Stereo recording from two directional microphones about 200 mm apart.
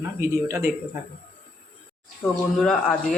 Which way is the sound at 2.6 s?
5° left (ahead or behind).